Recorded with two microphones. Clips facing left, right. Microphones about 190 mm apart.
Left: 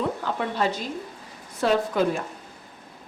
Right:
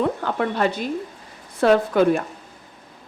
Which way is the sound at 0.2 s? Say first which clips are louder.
Right 4 dB; 60° right (ahead or behind).